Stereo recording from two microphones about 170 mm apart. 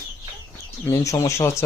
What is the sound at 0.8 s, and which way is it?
Speech, 20° left (ahead or behind).